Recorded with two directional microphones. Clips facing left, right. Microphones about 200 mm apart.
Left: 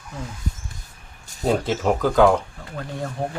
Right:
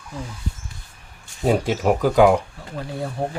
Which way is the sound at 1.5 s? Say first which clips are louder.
Right 2 dB; 10° right (ahead or behind).